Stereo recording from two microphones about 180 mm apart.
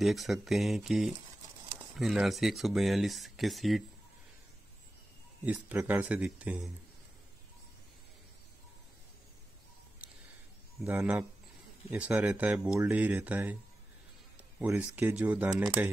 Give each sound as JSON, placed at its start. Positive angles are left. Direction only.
{"t": 0.0, "sound": "speech", "side_deg": 0}
{"t": 5.4, "sound": "speech", "side_deg": -10}
{"t": 10.8, "sound": "speech", "side_deg": -10}
{"t": 14.3, "sound": "a sound", "side_deg": -10}
{"t": 15.0, "sound": "speech", "side_deg": -10}